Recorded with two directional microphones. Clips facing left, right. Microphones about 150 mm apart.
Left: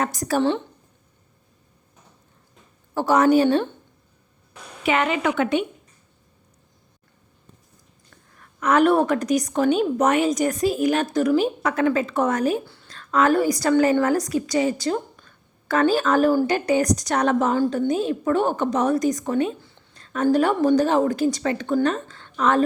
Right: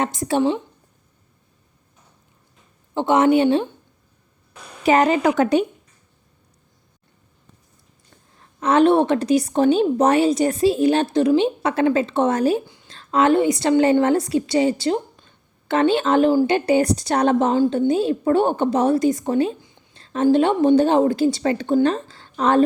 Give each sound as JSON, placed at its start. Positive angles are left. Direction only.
{"t": 0.0, "sound": "a woman's voice", "side_deg": -25}
{"t": 2.9, "sound": "a woman's voice", "side_deg": -20}
{"t": 4.8, "sound": "a woman's voice", "side_deg": -35}
{"t": 8.4, "sound": "a woman's voice", "side_deg": -25}
{"t": 12.6, "sound": "a sound", "side_deg": -15}
{"t": 12.9, "sound": "a woman's voice", "side_deg": -25}
{"t": 19.9, "sound": "a sound", "side_deg": -25}
{"t": 20.3, "sound": "a woman's voice", "side_deg": -25}